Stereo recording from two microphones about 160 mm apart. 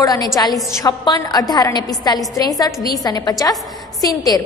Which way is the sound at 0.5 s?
Centre (ahead or behind).